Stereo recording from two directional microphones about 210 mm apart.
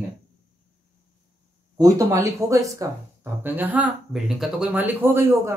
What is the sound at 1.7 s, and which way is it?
Speech, 15° right (ahead or behind).